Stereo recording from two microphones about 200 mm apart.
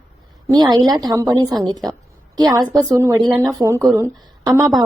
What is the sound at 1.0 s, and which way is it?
A woman's voice, 20° right (ahead or behind).